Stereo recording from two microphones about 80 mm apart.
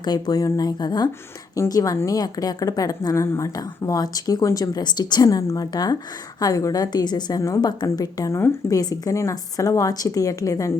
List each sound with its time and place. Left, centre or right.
0.0 s a woman's voice: left
1.5 s a woman's voice: left
3.5 s a woman's voice: left